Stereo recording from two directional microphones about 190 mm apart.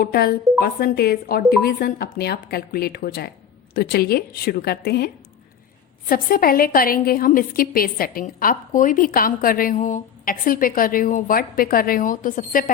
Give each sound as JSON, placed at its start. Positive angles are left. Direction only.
{"t": 0.0, "sound": "a woman's voice", "side_deg": 55}